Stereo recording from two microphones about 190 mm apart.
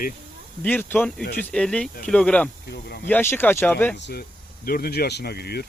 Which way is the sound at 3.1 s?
10° left (ahead or behind).